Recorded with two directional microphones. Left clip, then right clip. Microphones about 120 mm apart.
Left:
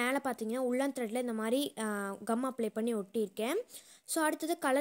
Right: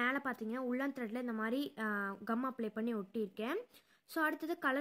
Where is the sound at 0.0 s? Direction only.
20° left (ahead or behind).